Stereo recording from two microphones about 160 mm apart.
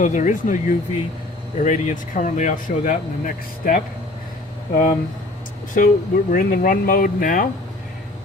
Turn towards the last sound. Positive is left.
turn(degrees=60)  # may be behind; listen again after turning